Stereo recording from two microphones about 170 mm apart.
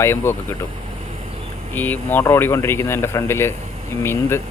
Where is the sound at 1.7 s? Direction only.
10° left (ahead or behind).